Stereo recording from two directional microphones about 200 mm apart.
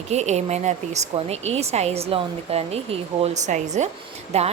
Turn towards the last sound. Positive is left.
turn(degrees=-30)  # may be behind; listen again after turning